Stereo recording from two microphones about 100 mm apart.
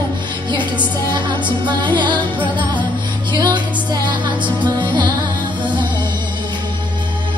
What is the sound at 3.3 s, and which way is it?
Music, 45° right (ahead or behind).